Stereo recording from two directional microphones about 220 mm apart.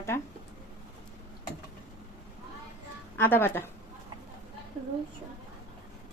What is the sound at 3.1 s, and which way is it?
Speech, 10° left (ahead or behind).